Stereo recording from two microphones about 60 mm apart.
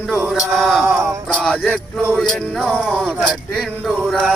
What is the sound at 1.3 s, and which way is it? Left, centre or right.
Music, centre.